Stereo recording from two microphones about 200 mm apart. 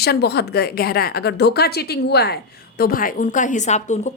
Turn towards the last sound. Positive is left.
turn(degrees=35)  # may be behind; listen again after turning